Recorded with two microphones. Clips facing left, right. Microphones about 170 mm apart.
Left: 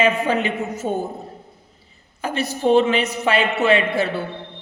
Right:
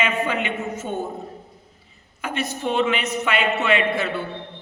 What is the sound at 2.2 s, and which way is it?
A man's voice, 35° left (ahead or behind).